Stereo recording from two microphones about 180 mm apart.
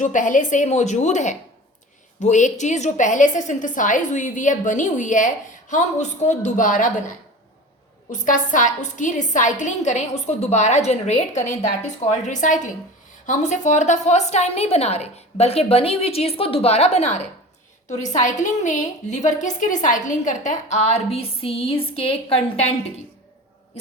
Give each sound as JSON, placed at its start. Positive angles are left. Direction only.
{"t": 0.0, "sound": "a woman's voice", "side_deg": 45}
{"t": 8.1, "sound": "a woman's voice", "side_deg": 45}